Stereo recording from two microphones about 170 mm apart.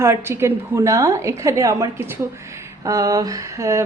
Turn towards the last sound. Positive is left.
turn(degrees=-15)  # may be behind; listen again after turning